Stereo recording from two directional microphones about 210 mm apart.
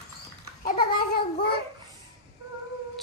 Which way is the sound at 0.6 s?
45° left (ahead or behind).